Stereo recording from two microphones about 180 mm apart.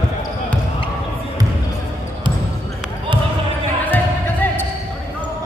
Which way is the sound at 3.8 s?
10° left (ahead or behind).